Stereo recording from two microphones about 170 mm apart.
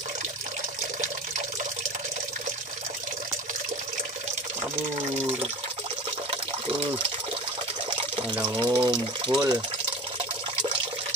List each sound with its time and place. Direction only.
5.0 s speech: 40° right (ahead or behind)
6.3 s water: 35° right (ahead or behind)
8.5 s speech: 30° right (ahead or behind)